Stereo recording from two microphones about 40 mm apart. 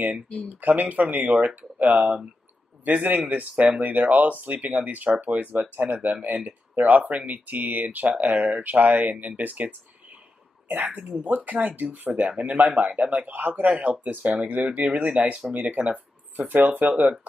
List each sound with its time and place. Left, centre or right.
0.6 s speech: right
10.9 s speech: right
14.9 s speech: right
15.5 s speech: right
16.6 s speech: right